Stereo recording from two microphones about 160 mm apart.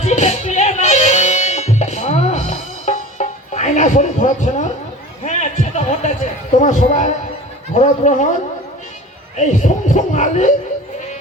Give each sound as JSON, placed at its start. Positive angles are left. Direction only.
{"t": 0.0, "sound": "music", "side_deg": 45}
{"t": 5.2, "sound": "a sound", "side_deg": 45}
{"t": 7.7, "sound": "speech", "side_deg": 45}
{"t": 9.3, "sound": "speech", "side_deg": 50}